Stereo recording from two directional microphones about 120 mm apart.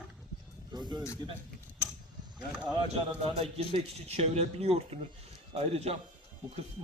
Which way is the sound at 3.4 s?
50° right (ahead or behind).